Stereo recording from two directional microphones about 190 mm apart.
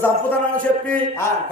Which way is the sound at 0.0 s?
10° left (ahead or behind).